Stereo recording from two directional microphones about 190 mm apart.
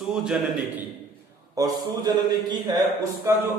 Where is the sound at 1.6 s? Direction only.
20° right (ahead or behind).